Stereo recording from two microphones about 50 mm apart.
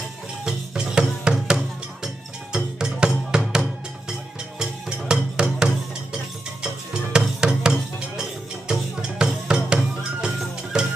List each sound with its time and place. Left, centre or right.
0.5 s music: centre